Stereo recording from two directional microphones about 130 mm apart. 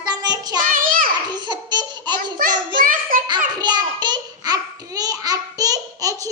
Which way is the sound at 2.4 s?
90° right.